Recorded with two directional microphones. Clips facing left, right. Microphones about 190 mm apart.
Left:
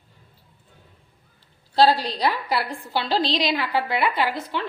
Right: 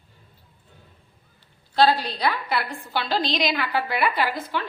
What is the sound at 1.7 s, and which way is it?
A woman's voice, 35° left (ahead or behind).